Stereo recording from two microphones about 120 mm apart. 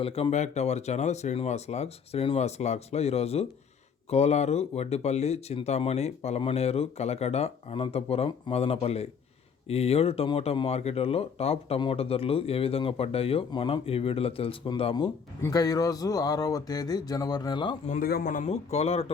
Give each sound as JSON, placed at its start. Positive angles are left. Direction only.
{"t": 0.0, "sound": "speech", "side_deg": 55}
{"t": 13.5, "sound": "speech", "side_deg": 40}
{"t": 15.4, "sound": "speech", "side_deg": 30}
{"t": 17.8, "sound": "speech", "side_deg": 90}